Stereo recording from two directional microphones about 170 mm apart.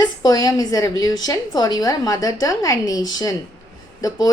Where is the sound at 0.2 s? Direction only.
20° left (ahead or behind).